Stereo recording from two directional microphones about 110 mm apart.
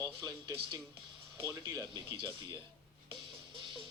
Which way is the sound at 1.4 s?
30° right (ahead or behind).